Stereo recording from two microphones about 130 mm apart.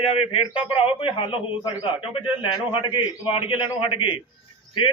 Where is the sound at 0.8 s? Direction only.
45° left (ahead or behind).